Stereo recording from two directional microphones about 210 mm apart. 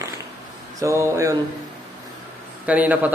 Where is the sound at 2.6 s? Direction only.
5° right (ahead or behind).